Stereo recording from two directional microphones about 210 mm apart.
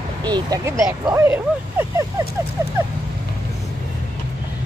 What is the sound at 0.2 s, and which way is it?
Speech, 20° right (ahead or behind).